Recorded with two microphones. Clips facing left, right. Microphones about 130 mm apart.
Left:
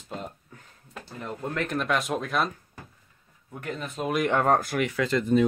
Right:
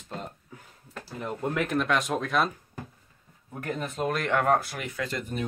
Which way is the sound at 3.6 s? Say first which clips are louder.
Right 2 dB; 45° right (ahead or behind).